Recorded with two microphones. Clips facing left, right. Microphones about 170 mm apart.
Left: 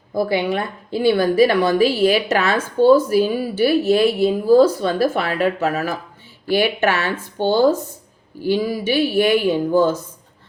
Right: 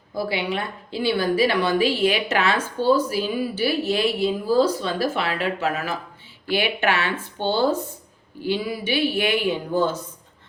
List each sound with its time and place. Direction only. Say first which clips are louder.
0.1 s a woman's voice: left 6 dB; 50° left (ahead or behind)